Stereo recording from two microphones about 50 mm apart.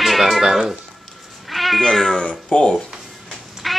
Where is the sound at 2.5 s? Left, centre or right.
Centre.